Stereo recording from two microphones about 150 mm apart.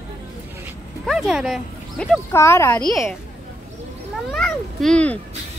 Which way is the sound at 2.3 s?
20° left (ahead or behind).